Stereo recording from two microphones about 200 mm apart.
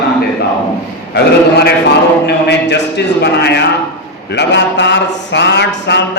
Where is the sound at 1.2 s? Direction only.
55° left (ahead or behind).